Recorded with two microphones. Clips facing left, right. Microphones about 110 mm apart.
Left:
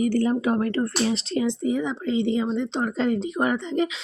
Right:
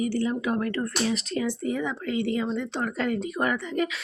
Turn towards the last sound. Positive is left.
turn(degrees=25)  # may be behind; listen again after turning